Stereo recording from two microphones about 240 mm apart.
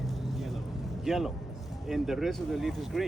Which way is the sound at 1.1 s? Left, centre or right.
Centre.